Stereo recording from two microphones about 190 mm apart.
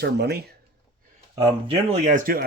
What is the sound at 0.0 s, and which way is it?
Speech, 60° right (ahead or behind).